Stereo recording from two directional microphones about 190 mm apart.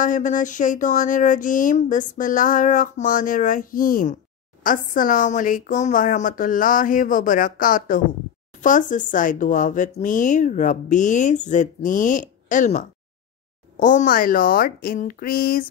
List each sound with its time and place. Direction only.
0.0 s speech: 45° left (ahead or behind)